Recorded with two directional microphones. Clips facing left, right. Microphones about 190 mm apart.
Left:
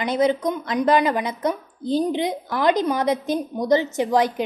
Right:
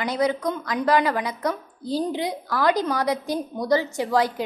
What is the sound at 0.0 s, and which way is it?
A woman's voice, 20° left (ahead or behind).